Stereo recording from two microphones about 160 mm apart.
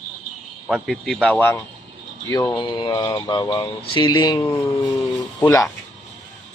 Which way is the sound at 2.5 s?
30° left (ahead or behind).